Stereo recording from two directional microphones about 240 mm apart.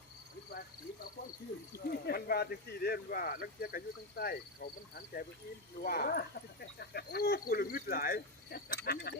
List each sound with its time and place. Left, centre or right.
1.9 s speech: left